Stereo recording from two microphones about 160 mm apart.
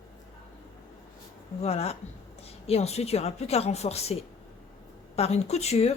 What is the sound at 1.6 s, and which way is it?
A woman's voice, 40° left (ahead or behind).